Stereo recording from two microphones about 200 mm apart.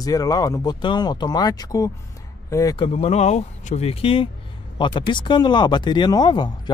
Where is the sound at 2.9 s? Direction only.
30° left (ahead or behind).